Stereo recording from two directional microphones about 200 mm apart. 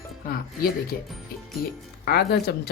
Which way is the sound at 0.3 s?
50° left (ahead or behind).